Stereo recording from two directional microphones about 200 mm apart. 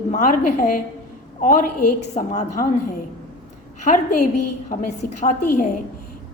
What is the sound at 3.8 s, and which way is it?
A woman's voice, 40° left (ahead or behind).